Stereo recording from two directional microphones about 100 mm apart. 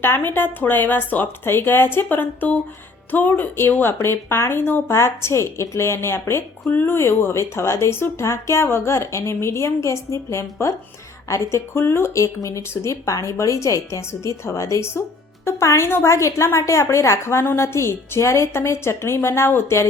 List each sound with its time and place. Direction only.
0.0 s speech: 20° left (ahead or behind)